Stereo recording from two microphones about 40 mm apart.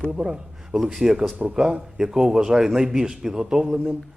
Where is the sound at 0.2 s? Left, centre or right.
Right.